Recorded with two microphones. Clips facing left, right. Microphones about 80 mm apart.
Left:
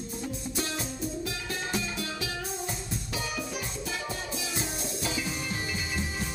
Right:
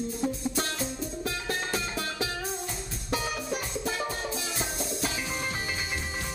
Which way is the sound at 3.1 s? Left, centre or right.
Right.